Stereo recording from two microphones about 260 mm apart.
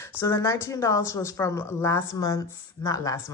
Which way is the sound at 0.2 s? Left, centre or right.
Centre.